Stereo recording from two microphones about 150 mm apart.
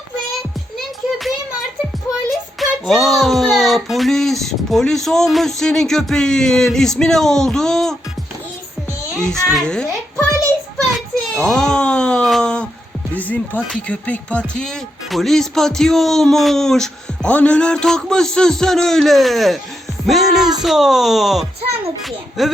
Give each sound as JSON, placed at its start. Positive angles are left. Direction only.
{"t": 2.6, "sound": "speech", "side_deg": 0}
{"t": 9.3, "sound": "a child's voice", "side_deg": 5}
{"t": 10.9, "sound": "a sound", "side_deg": 0}
{"t": 13.1, "sound": "speech", "side_deg": 10}
{"t": 21.6, "sound": "music", "side_deg": -40}
{"t": 22.4, "sound": "speech", "side_deg": 0}